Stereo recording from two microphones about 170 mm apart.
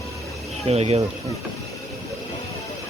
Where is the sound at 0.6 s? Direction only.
40° right (ahead or behind).